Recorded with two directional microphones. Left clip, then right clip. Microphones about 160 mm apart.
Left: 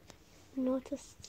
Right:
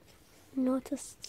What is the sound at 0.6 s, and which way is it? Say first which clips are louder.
Speech: right 3 dB; 30° right (ahead or behind).